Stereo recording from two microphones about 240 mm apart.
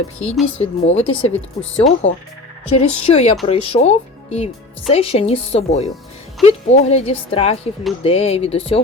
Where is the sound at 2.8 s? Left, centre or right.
Left.